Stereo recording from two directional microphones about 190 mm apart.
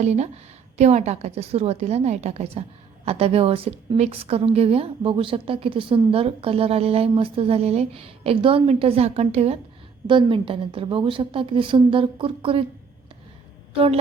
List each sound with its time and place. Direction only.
0.0 s a woman's voice: 35° right (ahead or behind)
13.7 s a woman's voice: 30° right (ahead or behind)